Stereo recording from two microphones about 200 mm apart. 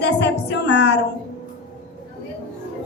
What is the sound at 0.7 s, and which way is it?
Speech, 60° left (ahead or behind).